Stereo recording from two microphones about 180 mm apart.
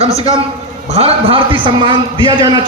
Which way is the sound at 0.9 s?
30° right (ahead or behind).